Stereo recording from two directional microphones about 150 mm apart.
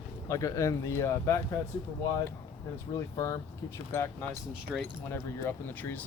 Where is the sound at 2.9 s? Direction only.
20° left (ahead or behind).